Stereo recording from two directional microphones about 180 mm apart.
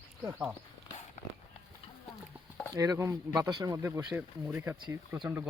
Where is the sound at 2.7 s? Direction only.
20° right (ahead or behind).